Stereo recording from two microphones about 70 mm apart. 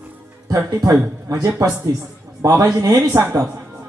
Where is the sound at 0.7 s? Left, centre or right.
Right.